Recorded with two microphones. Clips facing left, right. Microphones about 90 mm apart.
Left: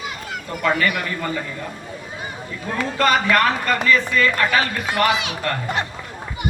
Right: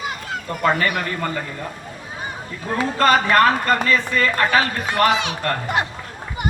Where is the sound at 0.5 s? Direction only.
40° right (ahead or behind).